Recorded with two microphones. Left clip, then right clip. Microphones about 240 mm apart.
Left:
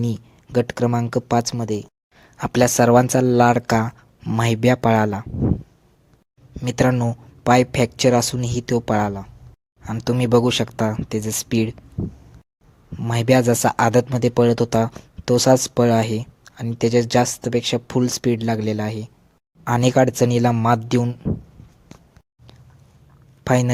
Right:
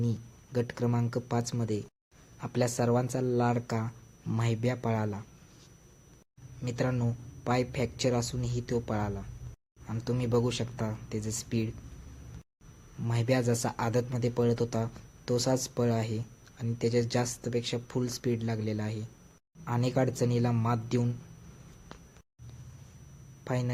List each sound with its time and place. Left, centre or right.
0.0 s speech: left
6.6 s speech: left
13.0 s speech: left
23.4 s a man's voice: left